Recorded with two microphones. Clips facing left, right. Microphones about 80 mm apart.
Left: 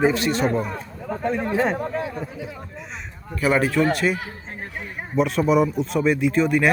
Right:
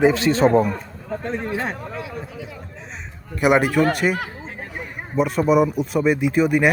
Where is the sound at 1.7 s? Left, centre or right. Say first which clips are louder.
Left 5 dB; left.